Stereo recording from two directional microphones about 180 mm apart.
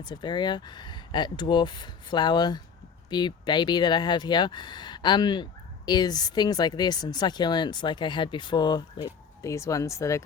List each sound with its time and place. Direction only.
0.0 s speech: 25° left (ahead or behind)